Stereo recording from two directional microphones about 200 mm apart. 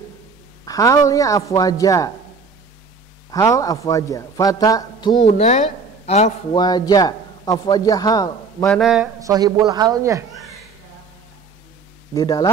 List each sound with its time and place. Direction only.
0.7 s a man's voice: 15° left (ahead or behind)
3.3 s a man's voice: 15° left (ahead or behind)
5.2 s speech: 35° left (ahead or behind)
6.6 s a man's voice: 20° left (ahead or behind)
8.6 s mantra: centre (ahead or behind)
9.2 s a man's voice: 20° right (ahead or behind)
10.3 s a sound: centre (ahead or behind)
12.1 s a man's voice: 15° left (ahead or behind)